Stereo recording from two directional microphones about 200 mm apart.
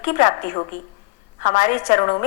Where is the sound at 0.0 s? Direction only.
40° left (ahead or behind).